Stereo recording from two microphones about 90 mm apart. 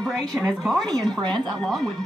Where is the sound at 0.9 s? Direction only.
50° right (ahead or behind).